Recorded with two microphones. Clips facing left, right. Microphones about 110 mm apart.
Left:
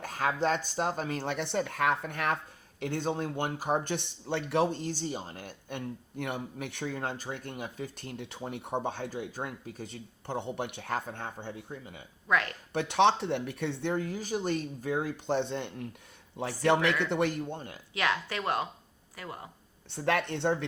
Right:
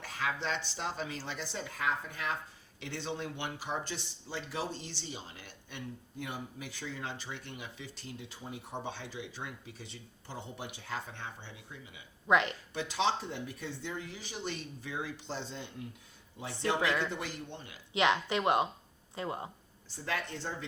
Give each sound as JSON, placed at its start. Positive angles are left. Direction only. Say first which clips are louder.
{"t": 0.0, "sound": "speech", "louder": "left 7 dB", "side_deg": 45}
{"t": 2.8, "sound": "speech", "louder": "left 7 dB", "side_deg": 45}
{"t": 12.3, "sound": "speech", "louder": "right 1 dB", "side_deg": -20}
{"t": 12.7, "sound": "speech", "louder": "left 8 dB", "side_deg": 60}
{"t": 15.4, "sound": "speech", "louder": "left 9 dB", "side_deg": 65}
{"t": 17.1, "sound": "speech", "louder": "left 10 dB", "side_deg": 60}
{"t": 17.9, "sound": "speech", "louder": "right 2 dB", "side_deg": -20}
{"t": 19.9, "sound": "speech", "louder": "left 8 dB", "side_deg": 65}